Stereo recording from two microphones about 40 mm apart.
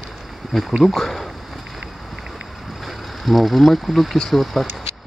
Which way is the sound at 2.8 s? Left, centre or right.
Centre.